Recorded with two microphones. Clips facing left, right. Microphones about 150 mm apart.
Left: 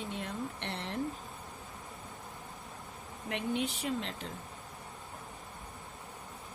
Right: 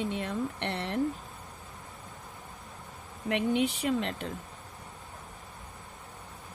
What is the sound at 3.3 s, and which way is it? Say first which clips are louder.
Speech: right 6 dB; 75° right (ahead or behind).